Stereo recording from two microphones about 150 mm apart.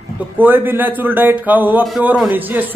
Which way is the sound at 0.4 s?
15° right (ahead or behind).